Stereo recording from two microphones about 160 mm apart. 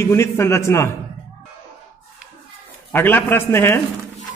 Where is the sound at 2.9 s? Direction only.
15° left (ahead or behind).